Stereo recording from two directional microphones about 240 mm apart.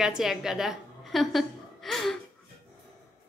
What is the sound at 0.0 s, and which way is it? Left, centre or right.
A woman's voice, centre.